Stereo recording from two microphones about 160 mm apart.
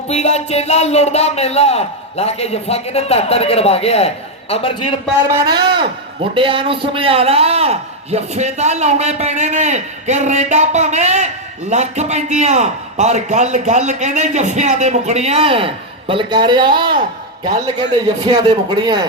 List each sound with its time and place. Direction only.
0.1 s a man's voice: 45° left (ahead or behind)
5.5 s a man's voice: 30° right (ahead or behind)
18.3 s speech: 30° right (ahead or behind)